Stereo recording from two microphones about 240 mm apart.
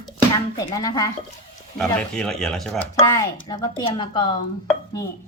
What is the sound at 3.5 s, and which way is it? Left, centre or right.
Speech, centre.